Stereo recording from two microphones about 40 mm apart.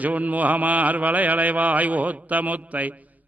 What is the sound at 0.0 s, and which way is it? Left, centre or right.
A man's voice, right.